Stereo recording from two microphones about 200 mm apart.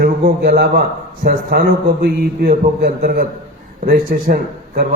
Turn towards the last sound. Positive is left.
turn(degrees=-45)  # may be behind; listen again after turning